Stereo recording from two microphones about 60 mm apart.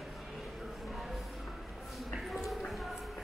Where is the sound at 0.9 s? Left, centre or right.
Centre.